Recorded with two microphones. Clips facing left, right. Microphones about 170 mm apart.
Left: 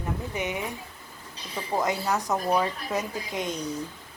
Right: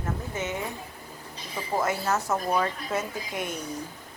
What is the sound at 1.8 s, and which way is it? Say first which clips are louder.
Speech: even; 15° left (ahead or behind).